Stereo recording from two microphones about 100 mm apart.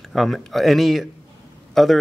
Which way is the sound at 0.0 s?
Centre (ahead or behind).